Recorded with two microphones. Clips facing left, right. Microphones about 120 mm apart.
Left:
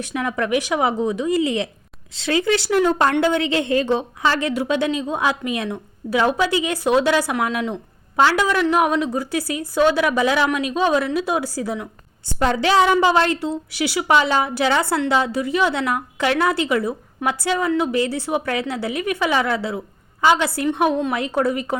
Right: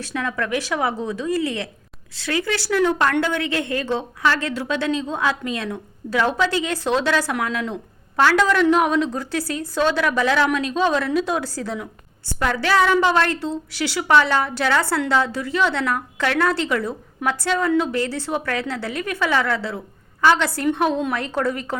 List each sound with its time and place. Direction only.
0.0 s a woman's voice: 15° left (ahead or behind)
12.4 s a woman's voice: 20° left (ahead or behind)